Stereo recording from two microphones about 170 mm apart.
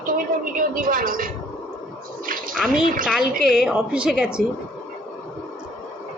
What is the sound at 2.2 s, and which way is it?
Bathtub, 55° right (ahead or behind).